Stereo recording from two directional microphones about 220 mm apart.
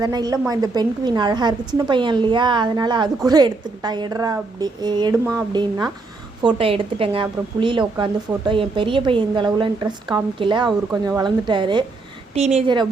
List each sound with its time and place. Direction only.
0.0 s a woman's voice: 15° right (ahead or behind)